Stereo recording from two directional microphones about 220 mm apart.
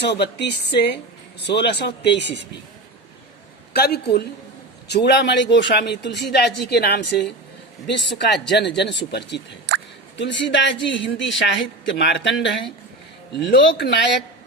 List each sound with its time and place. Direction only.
0.0 s speech: 50° left (ahead or behind)
3.7 s speech: 45° left (ahead or behind)
8.3 s speech: 50° left (ahead or behind)